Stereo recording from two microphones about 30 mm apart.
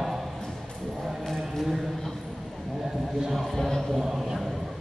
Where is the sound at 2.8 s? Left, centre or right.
Centre.